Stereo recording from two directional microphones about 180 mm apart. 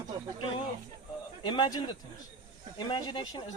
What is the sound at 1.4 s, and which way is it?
Speech, 25° left (ahead or behind).